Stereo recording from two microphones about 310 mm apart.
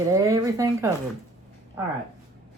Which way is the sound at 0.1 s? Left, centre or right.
Centre.